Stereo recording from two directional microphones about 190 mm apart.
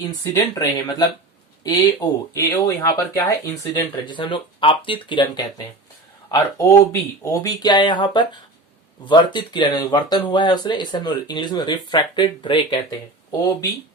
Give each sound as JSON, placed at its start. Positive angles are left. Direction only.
{"t": 0.3, "sound": "speech", "side_deg": 20}